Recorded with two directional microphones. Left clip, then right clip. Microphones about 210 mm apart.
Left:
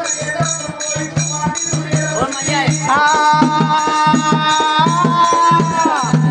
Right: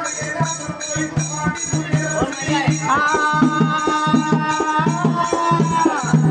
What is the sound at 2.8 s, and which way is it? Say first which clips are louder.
Music: left 6 dB; 35° left (ahead or behind).